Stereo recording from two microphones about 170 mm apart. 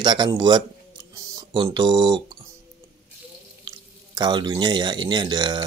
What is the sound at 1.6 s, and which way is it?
Speech, 25° right (ahead or behind).